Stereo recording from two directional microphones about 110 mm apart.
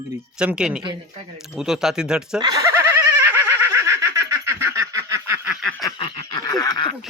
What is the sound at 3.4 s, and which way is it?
Snicker, 25° right (ahead or behind).